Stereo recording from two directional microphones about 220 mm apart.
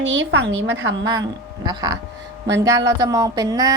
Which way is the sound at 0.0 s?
60° right (ahead or behind).